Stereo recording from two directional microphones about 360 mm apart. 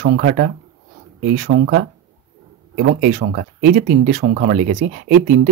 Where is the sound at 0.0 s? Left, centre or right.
Right.